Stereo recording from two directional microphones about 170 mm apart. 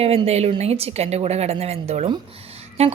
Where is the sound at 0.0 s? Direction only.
35° right (ahead or behind).